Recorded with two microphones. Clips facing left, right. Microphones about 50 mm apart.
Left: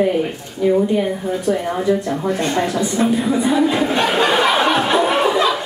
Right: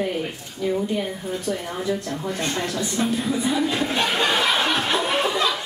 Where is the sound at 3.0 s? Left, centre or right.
Centre.